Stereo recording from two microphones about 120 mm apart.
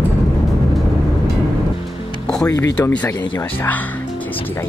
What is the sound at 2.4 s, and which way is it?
Speech, 25° left (ahead or behind).